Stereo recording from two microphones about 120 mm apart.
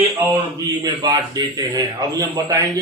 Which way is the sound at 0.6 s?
35° right (ahead or behind).